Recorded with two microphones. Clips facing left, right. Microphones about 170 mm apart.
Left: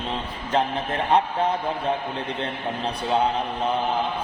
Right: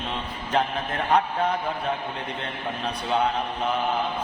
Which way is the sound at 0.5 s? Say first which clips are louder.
Left 2 dB; 25° left (ahead or behind).